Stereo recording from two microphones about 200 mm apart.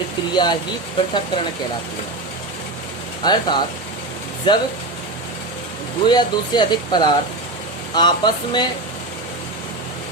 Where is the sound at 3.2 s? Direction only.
20° left (ahead or behind).